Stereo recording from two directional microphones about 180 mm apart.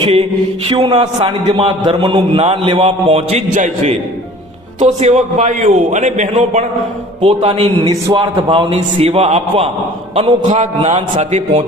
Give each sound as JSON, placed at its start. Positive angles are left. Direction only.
{"t": 0.0, "sound": "mantra", "side_deg": -35}
{"t": 0.7, "sound": "a man's voice", "side_deg": -30}